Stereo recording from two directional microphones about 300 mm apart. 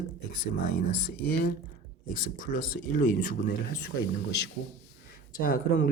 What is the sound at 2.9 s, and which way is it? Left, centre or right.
Speech, left.